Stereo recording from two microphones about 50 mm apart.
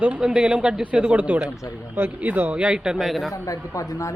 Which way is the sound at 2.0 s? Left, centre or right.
Right.